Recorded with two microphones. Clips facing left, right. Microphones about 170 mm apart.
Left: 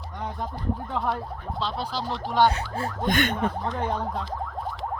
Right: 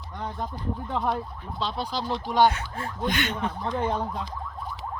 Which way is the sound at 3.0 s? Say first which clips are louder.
Left 3 dB; 50° left (ahead or behind).